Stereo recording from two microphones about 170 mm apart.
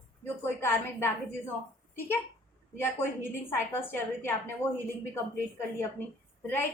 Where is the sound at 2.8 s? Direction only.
15° left (ahead or behind).